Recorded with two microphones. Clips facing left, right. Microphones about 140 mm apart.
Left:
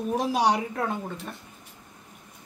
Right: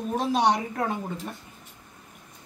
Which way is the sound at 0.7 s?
5° right (ahead or behind).